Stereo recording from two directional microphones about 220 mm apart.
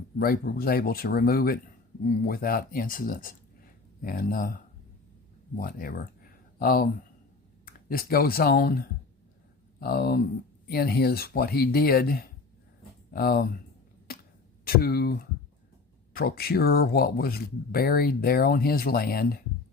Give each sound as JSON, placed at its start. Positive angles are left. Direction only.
{"t": 0.2, "sound": "speech", "side_deg": 45}
{"t": 14.1, "sound": "a sound", "side_deg": 40}
{"t": 14.6, "sound": "speech", "side_deg": 45}